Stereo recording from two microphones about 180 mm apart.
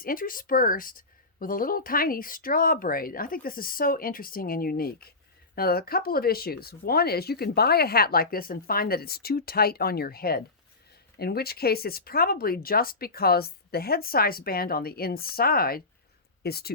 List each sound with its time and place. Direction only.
0.0 s speech: 50° left (ahead or behind)